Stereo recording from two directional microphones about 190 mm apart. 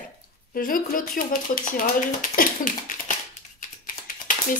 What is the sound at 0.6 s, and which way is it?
A woman's voice, 45° left (ahead or behind).